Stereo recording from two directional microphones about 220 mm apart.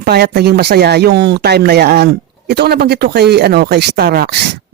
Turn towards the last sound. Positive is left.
turn(degrees=-45)  # may be behind; listen again after turning